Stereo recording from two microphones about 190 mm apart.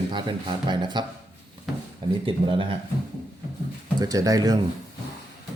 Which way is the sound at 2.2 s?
25° right (ahead or behind).